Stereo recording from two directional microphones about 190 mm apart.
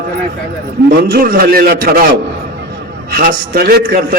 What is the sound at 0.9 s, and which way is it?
A man's voice, 50° right (ahead or behind).